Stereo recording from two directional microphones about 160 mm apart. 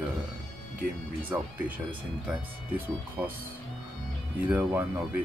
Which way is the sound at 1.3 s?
10° right (ahead or behind).